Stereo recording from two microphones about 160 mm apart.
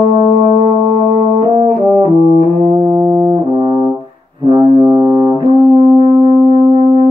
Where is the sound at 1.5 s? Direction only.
30° right (ahead or behind).